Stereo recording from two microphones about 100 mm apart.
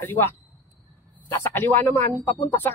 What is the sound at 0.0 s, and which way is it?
Speech, 20° left (ahead or behind).